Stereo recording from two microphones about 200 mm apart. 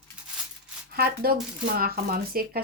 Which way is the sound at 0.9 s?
50° right (ahead or behind).